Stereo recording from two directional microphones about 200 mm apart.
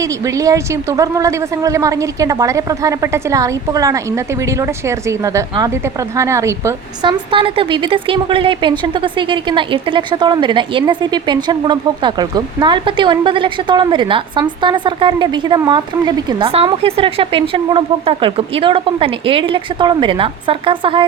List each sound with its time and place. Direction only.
0.0 s a woman's voice: 15° right (ahead or behind)